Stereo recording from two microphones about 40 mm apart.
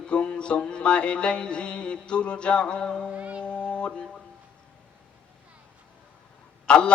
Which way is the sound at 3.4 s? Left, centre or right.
Left.